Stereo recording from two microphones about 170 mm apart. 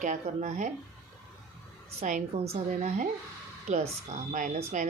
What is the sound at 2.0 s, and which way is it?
A woman's voice, 45° right (ahead or behind).